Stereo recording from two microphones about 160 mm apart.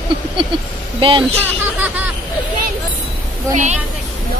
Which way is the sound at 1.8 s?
10° right (ahead or behind).